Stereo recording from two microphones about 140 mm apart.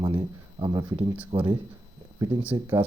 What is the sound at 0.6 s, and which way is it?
Speech, 25° right (ahead or behind).